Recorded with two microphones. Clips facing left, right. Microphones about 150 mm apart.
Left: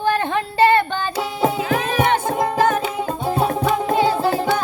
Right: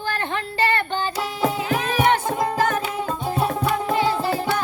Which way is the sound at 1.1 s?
25° left (ahead or behind).